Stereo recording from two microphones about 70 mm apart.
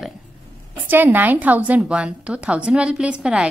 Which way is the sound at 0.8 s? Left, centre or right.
Right.